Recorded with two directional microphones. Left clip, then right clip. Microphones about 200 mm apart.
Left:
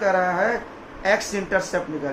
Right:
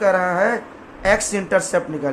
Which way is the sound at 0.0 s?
55° right (ahead or behind).